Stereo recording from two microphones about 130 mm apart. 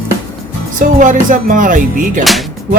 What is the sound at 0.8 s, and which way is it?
Speech, 90° right.